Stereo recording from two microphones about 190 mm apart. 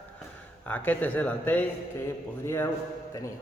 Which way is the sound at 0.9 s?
10° left (ahead or behind).